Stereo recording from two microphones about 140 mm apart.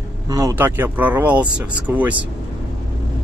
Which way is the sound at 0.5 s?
15° right (ahead or behind).